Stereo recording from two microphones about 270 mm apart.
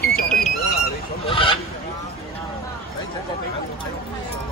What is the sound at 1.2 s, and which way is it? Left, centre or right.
Fowl, centre.